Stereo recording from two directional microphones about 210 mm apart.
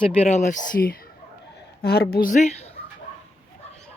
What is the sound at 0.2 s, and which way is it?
A woman's voice, 30° left (ahead or behind).